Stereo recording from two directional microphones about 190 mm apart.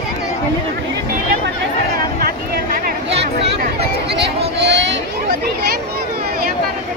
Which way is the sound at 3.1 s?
60° right (ahead or behind).